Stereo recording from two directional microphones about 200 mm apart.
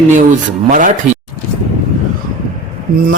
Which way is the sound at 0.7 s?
40° right (ahead or behind).